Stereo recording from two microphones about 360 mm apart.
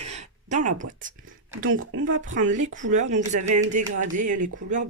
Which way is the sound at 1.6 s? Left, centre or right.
Right.